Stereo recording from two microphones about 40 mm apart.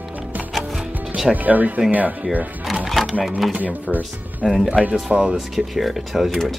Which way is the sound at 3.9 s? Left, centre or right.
Left.